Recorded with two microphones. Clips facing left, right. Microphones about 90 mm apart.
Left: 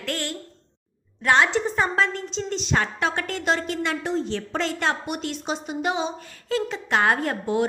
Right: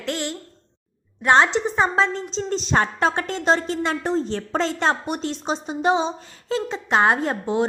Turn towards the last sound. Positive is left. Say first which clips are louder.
# right 2 dB
turn(degrees=-25)  # may be behind; listen again after turning